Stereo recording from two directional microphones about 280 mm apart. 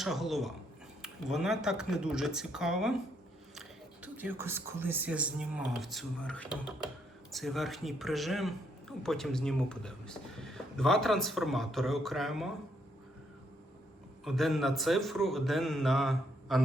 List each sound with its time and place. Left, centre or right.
0.0 s speech: centre
14.3 s speech: centre